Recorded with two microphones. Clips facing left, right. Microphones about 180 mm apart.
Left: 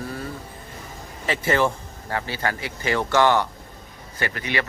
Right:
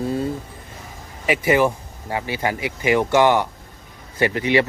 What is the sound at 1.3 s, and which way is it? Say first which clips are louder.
Speech: right 4 dB; 15° right (ahead or behind).